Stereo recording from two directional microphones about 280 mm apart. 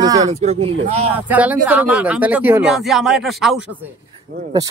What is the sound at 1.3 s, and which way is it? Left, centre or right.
Speech, centre.